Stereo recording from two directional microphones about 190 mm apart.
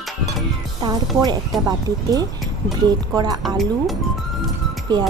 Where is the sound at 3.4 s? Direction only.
Centre (ahead or behind).